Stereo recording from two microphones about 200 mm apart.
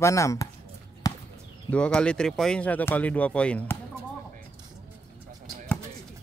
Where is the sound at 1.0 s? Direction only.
15° left (ahead or behind).